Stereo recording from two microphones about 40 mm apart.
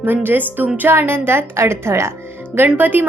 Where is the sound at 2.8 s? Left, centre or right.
Right.